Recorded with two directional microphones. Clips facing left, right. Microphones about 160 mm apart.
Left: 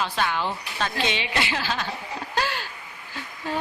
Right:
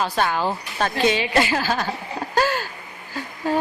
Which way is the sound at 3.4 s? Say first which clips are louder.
Right 7 dB; 45° right (ahead or behind).